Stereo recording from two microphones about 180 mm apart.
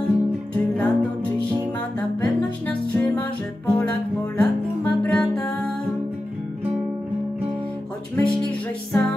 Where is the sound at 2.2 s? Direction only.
10° left (ahead or behind).